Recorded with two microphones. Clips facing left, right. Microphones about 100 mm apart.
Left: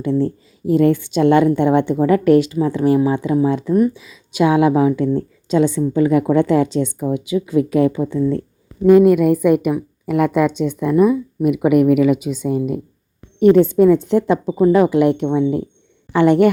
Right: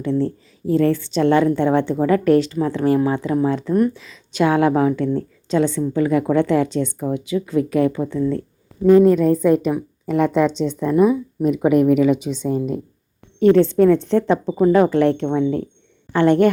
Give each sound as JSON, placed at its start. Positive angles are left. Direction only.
{"t": 0.0, "sound": "a woman's voice", "side_deg": 15}